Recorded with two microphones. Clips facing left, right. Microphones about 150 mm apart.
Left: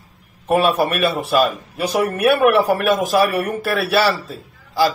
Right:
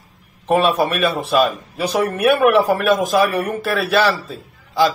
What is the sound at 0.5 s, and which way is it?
A man's voice, 10° left (ahead or behind).